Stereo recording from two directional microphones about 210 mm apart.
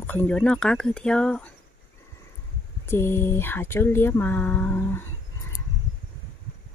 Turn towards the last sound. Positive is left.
turn(degrees=10)  # may be behind; listen again after turning